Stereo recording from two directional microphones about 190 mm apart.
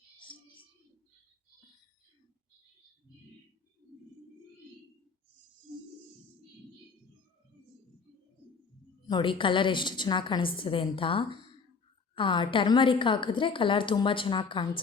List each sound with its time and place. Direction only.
9.0 s a woman's voice: 25° left (ahead or behind)